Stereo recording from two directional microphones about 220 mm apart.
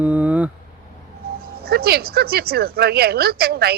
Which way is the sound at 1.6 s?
45° right (ahead or behind).